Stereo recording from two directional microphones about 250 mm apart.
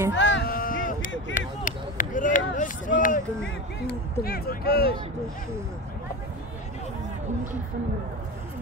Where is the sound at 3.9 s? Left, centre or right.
Left.